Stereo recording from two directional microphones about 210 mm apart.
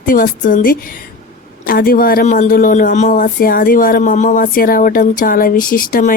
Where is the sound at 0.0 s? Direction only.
40° left (ahead or behind).